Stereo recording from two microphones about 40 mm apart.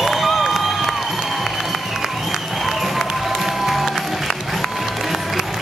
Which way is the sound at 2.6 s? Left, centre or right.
Centre.